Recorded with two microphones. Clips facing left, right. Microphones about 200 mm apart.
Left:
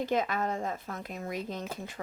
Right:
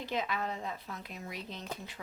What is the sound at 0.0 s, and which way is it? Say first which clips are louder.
Speech: left 6 dB; 45° left (ahead or behind).